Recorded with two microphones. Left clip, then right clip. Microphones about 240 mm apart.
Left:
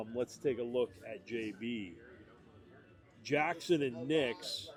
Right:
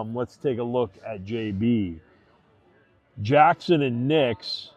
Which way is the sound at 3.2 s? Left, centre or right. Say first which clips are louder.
Right 16 dB; right.